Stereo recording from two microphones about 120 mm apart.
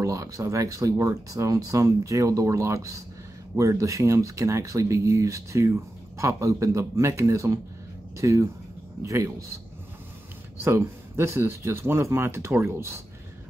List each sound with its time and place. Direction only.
0.0 s speech: 25° right (ahead or behind)
10.6 s speech: 20° right (ahead or behind)